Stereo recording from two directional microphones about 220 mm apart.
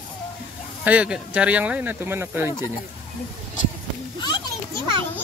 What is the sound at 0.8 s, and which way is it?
Speech, 5° right (ahead or behind).